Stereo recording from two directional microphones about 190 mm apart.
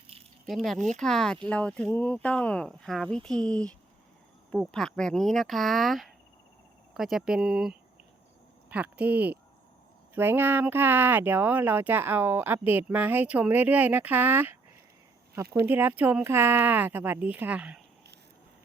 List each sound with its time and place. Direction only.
0.1 s a sound: 30° right (ahead or behind)
0.4 s speech: centre (ahead or behind)
15.6 s speech: 10° right (ahead or behind)